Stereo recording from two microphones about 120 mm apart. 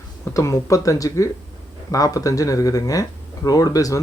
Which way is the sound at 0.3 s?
25° left (ahead or behind).